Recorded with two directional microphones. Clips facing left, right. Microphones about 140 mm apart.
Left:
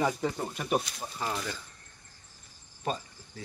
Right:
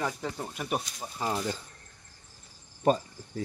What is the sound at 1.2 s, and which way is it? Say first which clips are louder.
Speech: right 4 dB; 20° right (ahead or behind).